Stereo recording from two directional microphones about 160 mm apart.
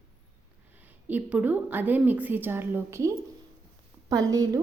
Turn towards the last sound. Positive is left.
turn(degrees=-20)  # may be behind; listen again after turning